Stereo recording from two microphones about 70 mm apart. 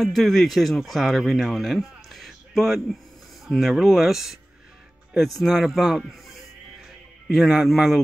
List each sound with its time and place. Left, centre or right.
0.0 s speech: centre
5.4 s speech: centre
7.2 s speech: centre